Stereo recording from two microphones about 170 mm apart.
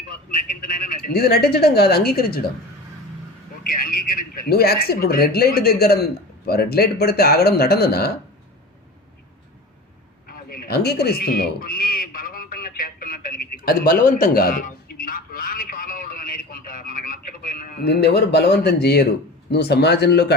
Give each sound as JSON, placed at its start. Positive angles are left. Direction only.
{"t": 0.9, "sound": "speech", "side_deg": 60}
{"t": 3.6, "sound": "speech", "side_deg": 60}
{"t": 10.2, "sound": "a sound", "side_deg": 60}
{"t": 19.5, "sound": "speech", "side_deg": 75}